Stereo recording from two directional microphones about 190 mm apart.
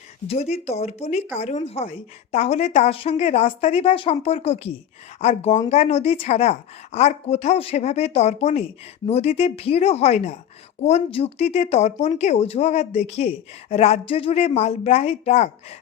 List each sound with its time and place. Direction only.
0.3 s speech: 35° left (ahead or behind)